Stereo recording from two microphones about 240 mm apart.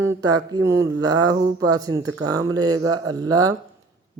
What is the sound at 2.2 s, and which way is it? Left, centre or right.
Speech, centre.